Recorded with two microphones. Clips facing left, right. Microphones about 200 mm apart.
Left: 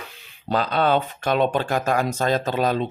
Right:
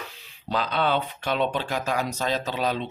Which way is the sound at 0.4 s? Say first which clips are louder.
Left 4 dB; 45° left (ahead or behind).